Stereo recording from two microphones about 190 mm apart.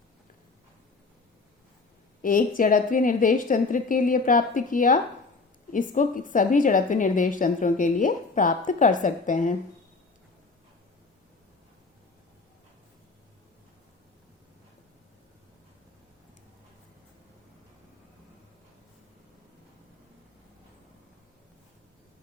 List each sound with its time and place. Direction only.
2.2 s a woman's voice: 45° left (ahead or behind)